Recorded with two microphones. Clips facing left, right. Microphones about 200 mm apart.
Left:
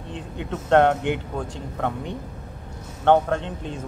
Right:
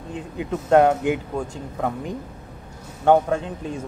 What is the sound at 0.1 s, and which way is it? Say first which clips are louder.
A man's voice: right 3 dB; 5° right (ahead or behind).